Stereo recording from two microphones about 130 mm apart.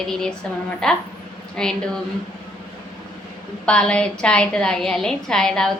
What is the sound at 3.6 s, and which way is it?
A woman's voice, 10° left (ahead or behind).